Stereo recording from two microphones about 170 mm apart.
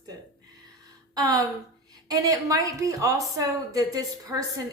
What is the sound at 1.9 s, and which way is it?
Speech, 20° right (ahead or behind).